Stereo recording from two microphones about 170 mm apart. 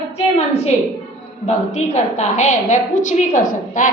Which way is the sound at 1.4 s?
45° left (ahead or behind).